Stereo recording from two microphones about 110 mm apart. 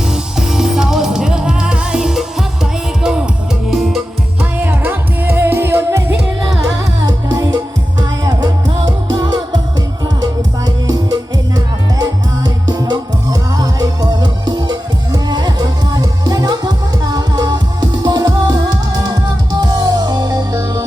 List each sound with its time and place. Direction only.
0.1 s music: 5° right (ahead or behind)
3.7 s music: centre (ahead or behind)
4.5 s music: 15° right (ahead or behind)
7.0 s music: 35° right (ahead or behind)
10.8 s music: 35° right (ahead or behind)